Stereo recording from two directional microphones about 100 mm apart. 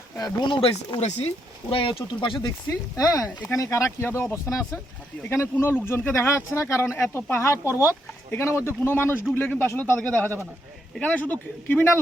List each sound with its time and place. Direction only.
0.4 s speech: 55° left (ahead or behind); by 1.3 s 80° left
1.7 s speech: 70° left (ahead or behind)
3.0 s speech: 35° left (ahead or behind)
10.0 s speech: 10° left (ahead or behind)